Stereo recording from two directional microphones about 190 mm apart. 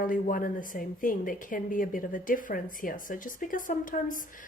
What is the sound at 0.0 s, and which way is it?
Speech, 45° left (ahead or behind).